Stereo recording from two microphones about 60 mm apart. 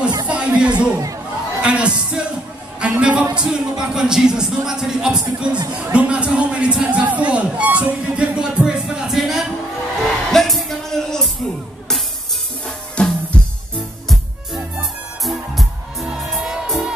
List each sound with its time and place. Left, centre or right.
0.3 s music: centre
1.6 s speech: centre
8.4 s music: centre
12.6 s drum: centre
15.2 s music: centre